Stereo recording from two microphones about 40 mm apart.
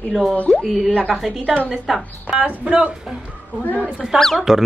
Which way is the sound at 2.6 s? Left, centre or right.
Right.